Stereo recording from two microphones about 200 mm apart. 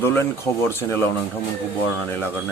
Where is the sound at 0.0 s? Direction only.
10° left (ahead or behind).